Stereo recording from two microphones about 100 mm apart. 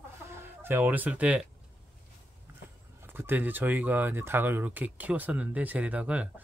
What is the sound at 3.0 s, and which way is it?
Speech, 20° right (ahead or behind).